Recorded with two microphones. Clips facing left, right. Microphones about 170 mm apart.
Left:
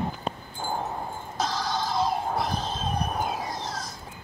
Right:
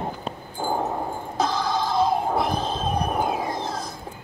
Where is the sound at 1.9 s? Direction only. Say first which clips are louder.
Right 5 dB; 55° right (ahead or behind).